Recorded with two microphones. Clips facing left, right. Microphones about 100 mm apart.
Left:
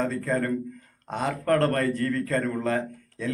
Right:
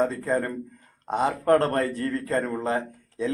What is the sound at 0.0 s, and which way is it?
A man's voice, 20° right (ahead or behind).